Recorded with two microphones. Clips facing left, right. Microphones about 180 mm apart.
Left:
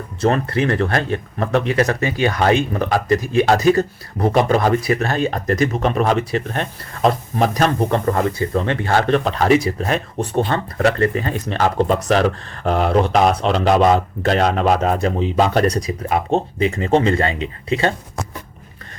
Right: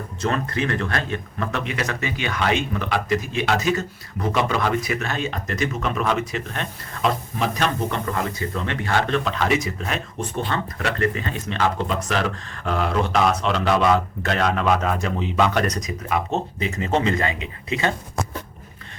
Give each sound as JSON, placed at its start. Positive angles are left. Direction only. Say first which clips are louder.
{"t": 0.2, "sound": "speech", "louder": "left 6 dB", "side_deg": 35}